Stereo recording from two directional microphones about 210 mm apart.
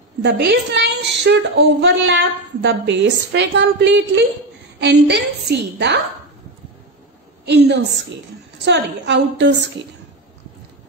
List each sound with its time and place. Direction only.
0.2 s a woman's voice: 55° right (ahead or behind)
7.4 s a woman's voice: 55° right (ahead or behind)